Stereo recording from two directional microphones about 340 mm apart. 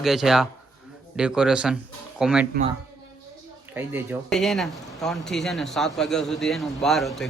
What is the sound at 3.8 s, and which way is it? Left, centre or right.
Speech, centre.